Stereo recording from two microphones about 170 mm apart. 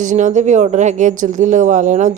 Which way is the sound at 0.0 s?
50° right (ahead or behind).